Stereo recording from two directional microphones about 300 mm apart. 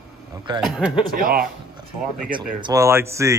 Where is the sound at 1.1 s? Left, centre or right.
Right.